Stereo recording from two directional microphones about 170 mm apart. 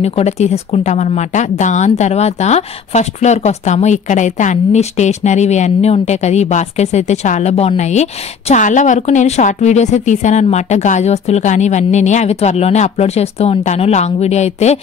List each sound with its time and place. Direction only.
0.0 s speech: 40° left (ahead or behind)